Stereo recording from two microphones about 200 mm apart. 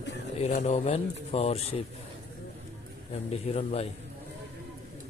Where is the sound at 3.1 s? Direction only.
30° left (ahead or behind).